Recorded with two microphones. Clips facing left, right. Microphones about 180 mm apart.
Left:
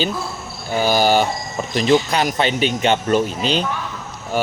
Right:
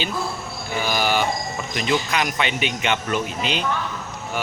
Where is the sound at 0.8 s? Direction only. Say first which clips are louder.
Left 6 dB; 35° left (ahead or behind).